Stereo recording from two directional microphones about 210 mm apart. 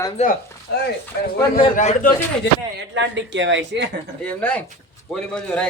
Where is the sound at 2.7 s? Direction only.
60° right (ahead or behind).